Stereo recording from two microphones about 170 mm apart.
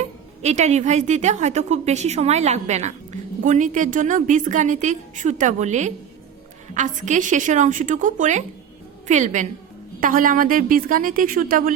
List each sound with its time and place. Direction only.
0.4 s a woman's voice: 40° right (ahead or behind)